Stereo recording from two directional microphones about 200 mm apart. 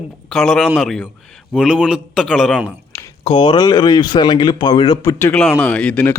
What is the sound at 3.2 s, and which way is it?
Speech, 25° left (ahead or behind).